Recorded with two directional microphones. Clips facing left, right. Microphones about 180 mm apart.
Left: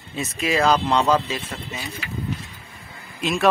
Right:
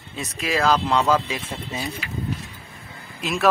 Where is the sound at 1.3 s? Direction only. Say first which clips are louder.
Even; 20° right (ahead or behind).